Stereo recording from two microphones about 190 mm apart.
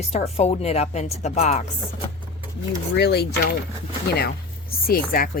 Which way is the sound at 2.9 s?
60° left (ahead or behind).